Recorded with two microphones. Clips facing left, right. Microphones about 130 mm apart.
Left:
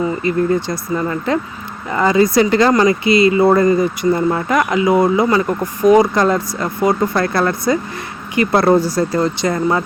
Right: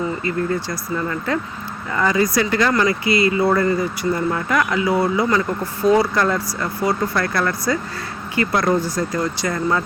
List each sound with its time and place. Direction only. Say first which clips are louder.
0.0 s speech: left 5 dB; 20° left (ahead or behind)